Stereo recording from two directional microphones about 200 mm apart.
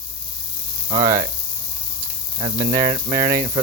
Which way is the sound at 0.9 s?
15° right (ahead or behind).